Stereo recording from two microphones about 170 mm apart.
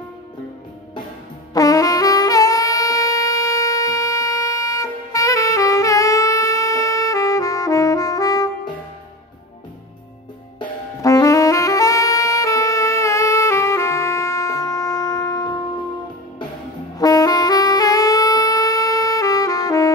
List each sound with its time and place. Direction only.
1.5 s saxophone: 20° left (ahead or behind)
10.6 s saxophone: 20° left (ahead or behind)
17.0 s saxophone: 20° left (ahead or behind)